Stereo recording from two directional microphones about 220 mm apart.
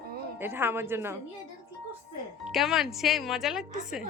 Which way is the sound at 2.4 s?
Centre (ahead or behind).